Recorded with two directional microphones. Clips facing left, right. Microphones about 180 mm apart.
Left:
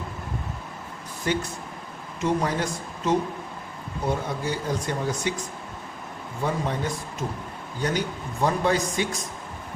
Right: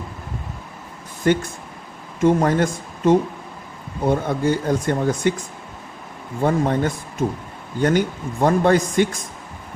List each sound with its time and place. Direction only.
1.2 s speech: 55° right (ahead or behind)
6.4 s speech: 50° right (ahead or behind)